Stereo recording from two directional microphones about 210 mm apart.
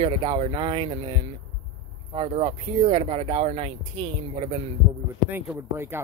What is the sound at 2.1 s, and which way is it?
Speech, 25° right (ahead or behind).